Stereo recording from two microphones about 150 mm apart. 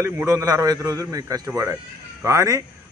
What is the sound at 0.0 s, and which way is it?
A man's voice, 20° right (ahead or behind).